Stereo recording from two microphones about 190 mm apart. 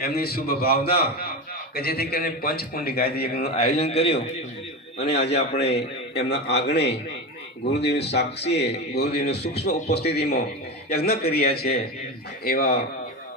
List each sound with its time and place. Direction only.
0.0 s a man's voice: 55° left (ahead or behind)
3.5 s a man's voice: 30° left (ahead or behind)
5.1 s a man's voice: 65° left (ahead or behind)